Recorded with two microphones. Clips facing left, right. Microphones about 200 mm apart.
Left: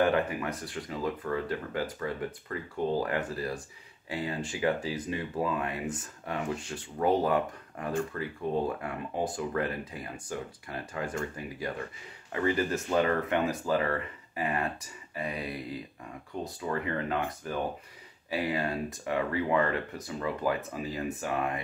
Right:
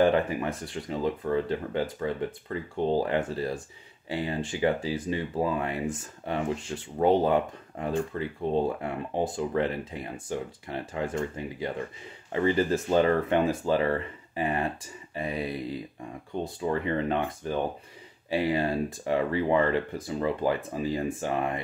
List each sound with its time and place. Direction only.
0.0 s speech: 25° right (ahead or behind)
7.0 s speech: 25° right (ahead or behind)
16.4 s speech: 25° right (ahead or behind)